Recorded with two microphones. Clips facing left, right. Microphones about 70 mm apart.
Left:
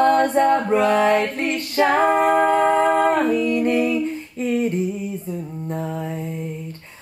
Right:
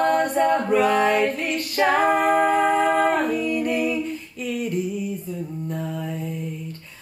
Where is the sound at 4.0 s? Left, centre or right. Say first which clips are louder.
Left 5 dB; left.